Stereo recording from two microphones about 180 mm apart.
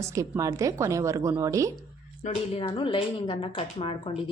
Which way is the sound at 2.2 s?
30° left (ahead or behind).